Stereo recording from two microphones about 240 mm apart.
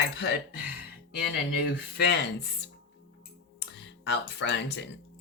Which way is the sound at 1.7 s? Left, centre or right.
Left.